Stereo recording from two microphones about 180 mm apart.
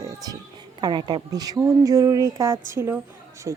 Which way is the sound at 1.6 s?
15° right (ahead or behind).